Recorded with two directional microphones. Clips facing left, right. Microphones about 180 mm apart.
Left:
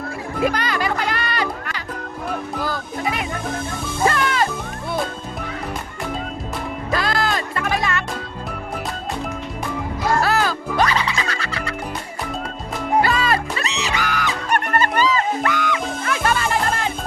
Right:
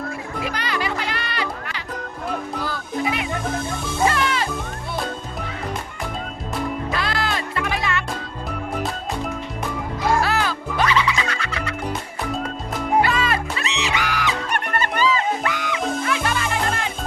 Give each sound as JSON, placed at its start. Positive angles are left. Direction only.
{"t": 0.4, "sound": "music", "side_deg": 45}
{"t": 6.9, "sound": "music", "side_deg": 40}
{"t": 10.2, "sound": "music", "side_deg": 40}
{"t": 13.0, "sound": "music", "side_deg": 35}